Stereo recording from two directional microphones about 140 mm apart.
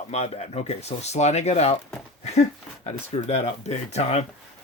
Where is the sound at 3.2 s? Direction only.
50° left (ahead or behind).